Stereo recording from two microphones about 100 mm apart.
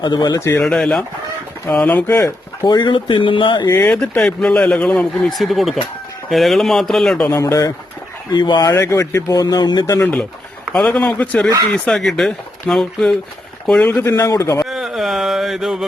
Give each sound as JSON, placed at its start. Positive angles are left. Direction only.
{"t": 0.0, "sound": "speech", "side_deg": 45}
{"t": 0.3, "sound": "speech", "side_deg": 25}
{"t": 0.6, "sound": "speech", "side_deg": 5}
{"t": 2.6, "sound": "speech", "side_deg": 50}
{"t": 3.7, "sound": "speech", "side_deg": 20}
{"t": 4.0, "sound": "speech", "side_deg": 10}
{"t": 7.3, "sound": "speech", "side_deg": 30}
{"t": 8.3, "sound": "speech", "side_deg": 45}
{"t": 8.6, "sound": "speech", "side_deg": 25}
{"t": 9.3, "sound": "speech", "side_deg": 40}
{"t": 10.8, "sound": "speech", "side_deg": 10}
{"t": 11.7, "sound": "speech", "side_deg": 5}
{"t": 14.0, "sound": "speech", "side_deg": 30}
{"t": 14.7, "sound": "a sound", "side_deg": -5}